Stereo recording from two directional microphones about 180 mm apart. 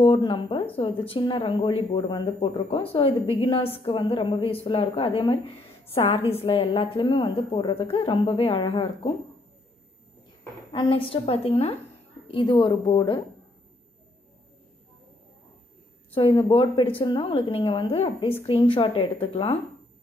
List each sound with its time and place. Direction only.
0.0 s speech: 25° left (ahead or behind)
10.7 s speech: 30° left (ahead or behind)
16.2 s speech: 25° left (ahead or behind)